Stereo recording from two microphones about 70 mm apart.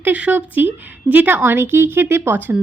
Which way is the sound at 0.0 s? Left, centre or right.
Right.